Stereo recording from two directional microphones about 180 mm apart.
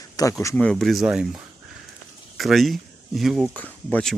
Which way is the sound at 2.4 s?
Centre (ahead or behind).